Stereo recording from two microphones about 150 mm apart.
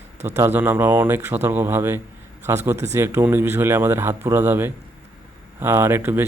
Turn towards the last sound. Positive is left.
turn(degrees=-15)  # may be behind; listen again after turning